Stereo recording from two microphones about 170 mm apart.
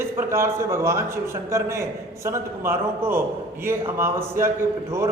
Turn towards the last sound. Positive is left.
turn(degrees=-15)  # may be behind; listen again after turning